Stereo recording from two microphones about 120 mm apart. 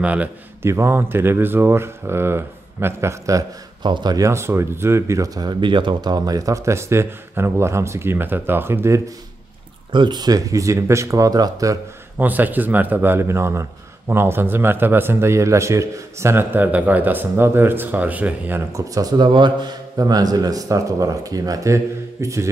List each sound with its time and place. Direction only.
0.0 s speech: 10° right (ahead or behind)
3.8 s speech: 40° right (ahead or behind); by 9.0 s 20° right (ahead or behind)
9.9 s speech: 35° right (ahead or behind)
12.2 s speech: 15° right (ahead or behind)
18.7 s a man's voice: 30° right (ahead or behind)